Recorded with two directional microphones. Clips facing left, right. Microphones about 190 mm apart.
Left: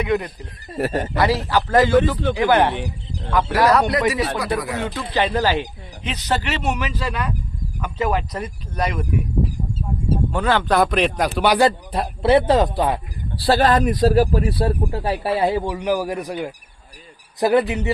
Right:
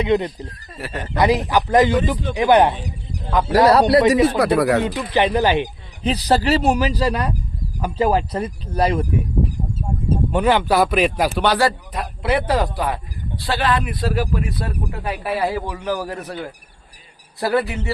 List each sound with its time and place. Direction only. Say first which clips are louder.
0.0 s speech: right 3 dB; 20° right (ahead or behind)
0.8 s speech: left 8 dB; 45° left (ahead or behind)
1.1 s a man's voice: right 5 dB; 20° right (ahead or behind)
3.6 s speech: right 5 dB; 30° right (ahead or behind)
4.4 s speech: right 8 dB; 60° right (ahead or behind)
4.8 s a man's voice: right 3 dB; 15° right (ahead or behind)
6.0 s speech: right 6 dB; 35° right (ahead or behind)
10.3 s a man's voice: right 2 dB; 15° right (ahead or behind)
11.4 s speech: left 3 dB; 15° left (ahead or behind)
11.9 s a man's voice: left 5 dB; 30° left (ahead or behind)